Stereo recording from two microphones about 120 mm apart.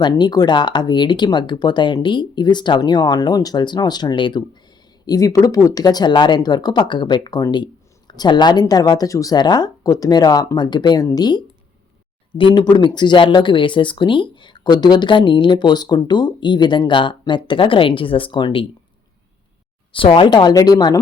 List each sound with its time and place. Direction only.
0.0 s speech: 35° left (ahead or behind)
5.0 s speech: 30° left (ahead or behind)
19.9 s speech: 45° left (ahead or behind); by 21.0 s 30° left (ahead or behind)